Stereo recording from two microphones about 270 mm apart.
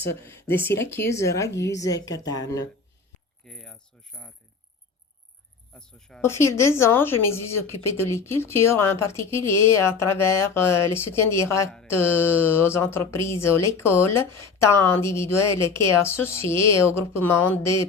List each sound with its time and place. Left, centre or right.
0.1 s speech: centre
1.5 s a woman's voice: left
1.7 s speech: centre
3.4 s speech: centre
5.7 s speech: centre